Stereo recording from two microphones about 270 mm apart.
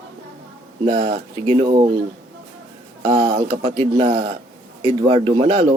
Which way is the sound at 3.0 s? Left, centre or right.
Right.